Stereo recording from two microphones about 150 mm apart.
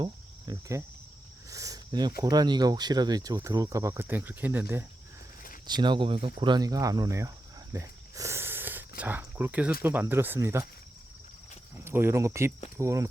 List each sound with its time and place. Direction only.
0.0 s cricket: 25° right (ahead or behind)
1.5 s speech: 20° right (ahead or behind)
5.6 s speech: 30° right (ahead or behind)
11.9 s speech: 15° right (ahead or behind)